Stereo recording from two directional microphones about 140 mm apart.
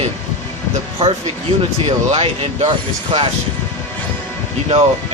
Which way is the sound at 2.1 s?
45° right (ahead or behind).